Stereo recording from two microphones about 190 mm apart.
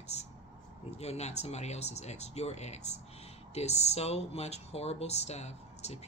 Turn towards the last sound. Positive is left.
turn(degrees=35)  # may be behind; listen again after turning